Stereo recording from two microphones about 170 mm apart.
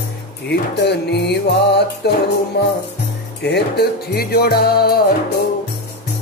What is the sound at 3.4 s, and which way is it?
Speech, 70° left (ahead or behind).